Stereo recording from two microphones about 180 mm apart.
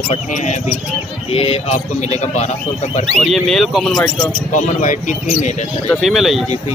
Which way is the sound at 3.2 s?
Centre (ahead or behind).